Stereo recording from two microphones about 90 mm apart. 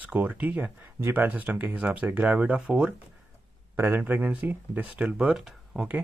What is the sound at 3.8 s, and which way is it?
Speech, 25° right (ahead or behind).